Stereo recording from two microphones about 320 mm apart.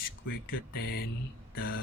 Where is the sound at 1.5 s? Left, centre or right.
Left.